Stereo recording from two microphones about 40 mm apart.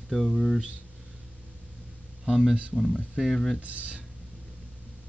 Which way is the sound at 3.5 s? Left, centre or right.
Right.